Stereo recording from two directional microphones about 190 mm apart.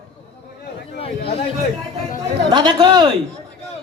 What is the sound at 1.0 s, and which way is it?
Chatter, 30° left (ahead or behind).